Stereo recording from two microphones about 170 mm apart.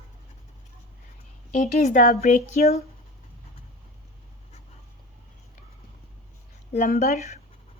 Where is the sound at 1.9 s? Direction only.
50° left (ahead or behind).